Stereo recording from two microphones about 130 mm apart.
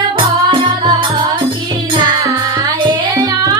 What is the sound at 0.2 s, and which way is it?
Music, 40° right (ahead or behind).